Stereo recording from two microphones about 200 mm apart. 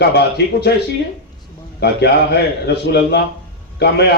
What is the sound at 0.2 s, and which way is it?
Speech, 55° left (ahead or behind).